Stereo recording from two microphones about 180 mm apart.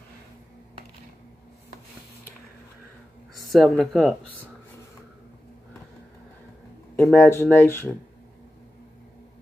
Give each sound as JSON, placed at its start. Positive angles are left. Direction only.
{"t": 3.5, "sound": "speech", "side_deg": 0}
{"t": 7.0, "sound": "speech", "side_deg": 10}